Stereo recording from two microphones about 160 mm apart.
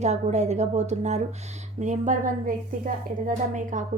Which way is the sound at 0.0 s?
45° right (ahead or behind).